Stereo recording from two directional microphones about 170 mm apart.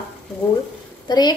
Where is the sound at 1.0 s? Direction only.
25° left (ahead or behind).